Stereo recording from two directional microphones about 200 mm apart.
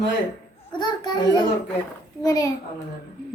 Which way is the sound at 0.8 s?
20° left (ahead or behind).